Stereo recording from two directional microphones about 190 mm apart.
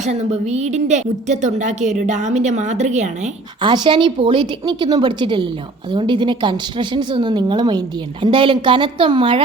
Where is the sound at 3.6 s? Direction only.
25° right (ahead or behind).